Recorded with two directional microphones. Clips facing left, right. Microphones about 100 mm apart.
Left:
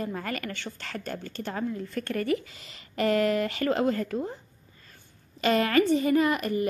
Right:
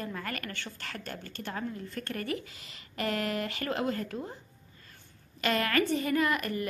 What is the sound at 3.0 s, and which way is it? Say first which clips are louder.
A woman's voice: left 8 dB; 30° left (ahead or behind).